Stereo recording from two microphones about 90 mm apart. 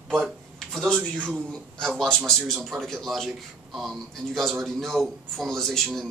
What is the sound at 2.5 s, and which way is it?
Speech, centre (ahead or behind).